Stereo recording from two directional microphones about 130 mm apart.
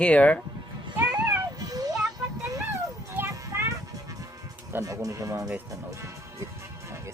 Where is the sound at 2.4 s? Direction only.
25° right (ahead or behind).